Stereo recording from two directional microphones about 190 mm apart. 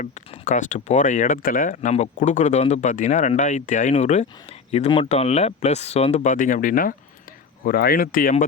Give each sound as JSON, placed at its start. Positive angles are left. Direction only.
{"t": 0.0, "sound": "speech", "side_deg": 40}